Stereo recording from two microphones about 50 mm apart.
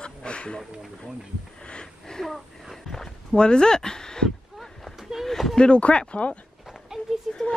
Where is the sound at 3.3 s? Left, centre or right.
Centre.